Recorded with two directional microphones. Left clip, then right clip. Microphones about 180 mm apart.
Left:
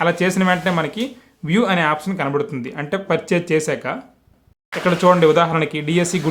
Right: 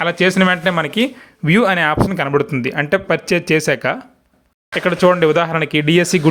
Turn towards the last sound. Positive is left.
turn(degrees=-25)  # may be behind; listen again after turning